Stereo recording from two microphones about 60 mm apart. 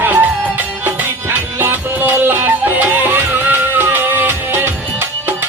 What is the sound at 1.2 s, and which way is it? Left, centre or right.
Music, right.